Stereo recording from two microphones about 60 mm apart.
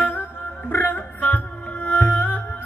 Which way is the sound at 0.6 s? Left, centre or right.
Left.